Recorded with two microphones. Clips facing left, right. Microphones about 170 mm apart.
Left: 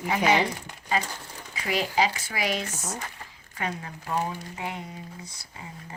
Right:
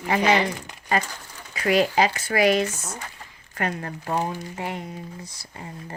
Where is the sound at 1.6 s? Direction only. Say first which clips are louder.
Right 6 dB; 65° right (ahead or behind).